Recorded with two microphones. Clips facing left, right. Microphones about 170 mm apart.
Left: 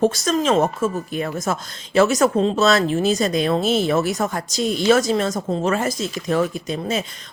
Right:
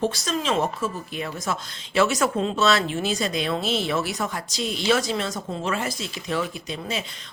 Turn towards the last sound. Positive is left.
turn(degrees=45)  # may be behind; listen again after turning